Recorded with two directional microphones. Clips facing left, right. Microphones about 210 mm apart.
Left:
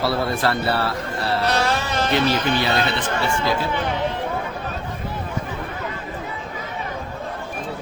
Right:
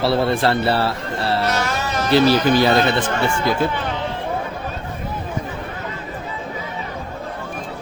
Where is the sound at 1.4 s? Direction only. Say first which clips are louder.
Even; 35° left (ahead or behind).